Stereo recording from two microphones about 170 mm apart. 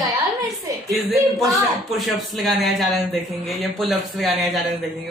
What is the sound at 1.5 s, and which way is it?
Speech, centre (ahead or behind).